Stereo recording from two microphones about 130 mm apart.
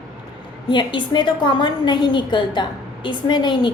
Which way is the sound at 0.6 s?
35° left (ahead or behind).